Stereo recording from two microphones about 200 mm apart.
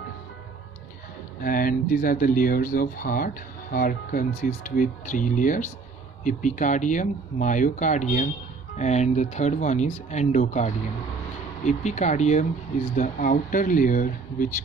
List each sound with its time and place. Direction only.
1.4 s speech: 45° left (ahead or behind)